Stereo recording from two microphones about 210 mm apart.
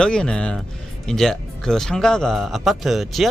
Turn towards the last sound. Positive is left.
turn(degrees=0)  # may be behind; listen again after turning